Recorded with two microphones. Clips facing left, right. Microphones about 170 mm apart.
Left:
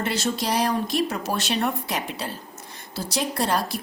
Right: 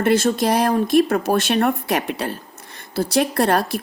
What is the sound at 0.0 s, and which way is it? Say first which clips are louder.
Speech: right 9 dB; 55° right (ahead or behind).